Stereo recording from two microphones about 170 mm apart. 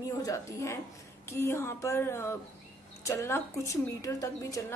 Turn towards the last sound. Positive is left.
turn(degrees=20)  # may be behind; listen again after turning